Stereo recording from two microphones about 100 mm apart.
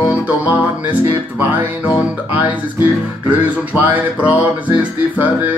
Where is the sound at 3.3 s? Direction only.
15° right (ahead or behind).